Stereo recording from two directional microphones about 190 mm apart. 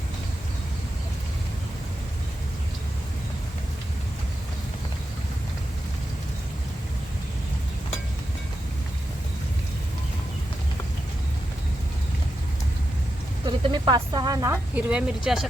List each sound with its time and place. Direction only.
13.4 s speech: 20° right (ahead or behind); by 15.4 s centre (ahead or behind)